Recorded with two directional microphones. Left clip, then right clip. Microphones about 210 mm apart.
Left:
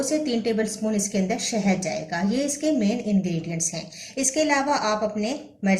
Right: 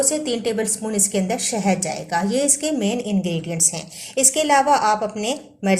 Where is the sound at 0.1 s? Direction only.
35° right (ahead or behind).